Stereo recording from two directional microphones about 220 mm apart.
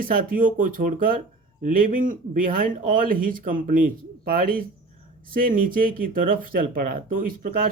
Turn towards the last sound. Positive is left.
turn(degrees=-40)  # may be behind; listen again after turning